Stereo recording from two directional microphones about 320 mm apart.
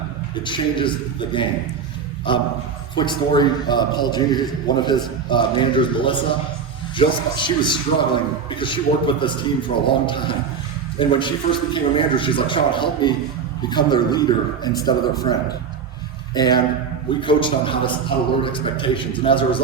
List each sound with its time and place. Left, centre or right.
0.4 s a man's voice: centre